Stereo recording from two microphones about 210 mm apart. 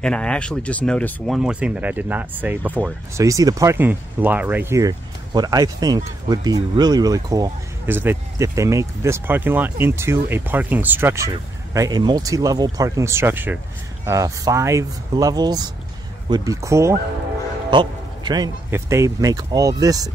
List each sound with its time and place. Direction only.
0.0 s speech: 5° left (ahead or behind); by 20.1 s 15° right (ahead or behind)